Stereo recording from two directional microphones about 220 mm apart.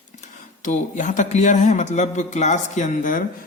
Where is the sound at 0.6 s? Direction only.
35° left (ahead or behind).